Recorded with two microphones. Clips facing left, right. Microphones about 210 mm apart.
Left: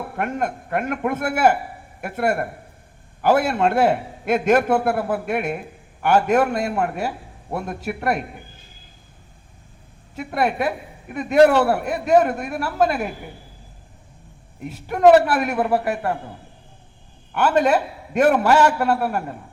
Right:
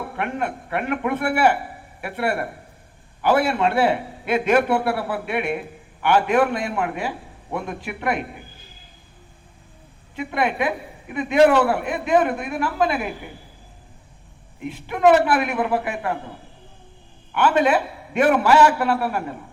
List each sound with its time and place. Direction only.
0.2 s a man's voice: 40° left (ahead or behind)
10.2 s a man's voice: 40° left (ahead or behind)
14.6 s a man's voice: 45° left (ahead or behind)
17.3 s a man's voice: 40° left (ahead or behind)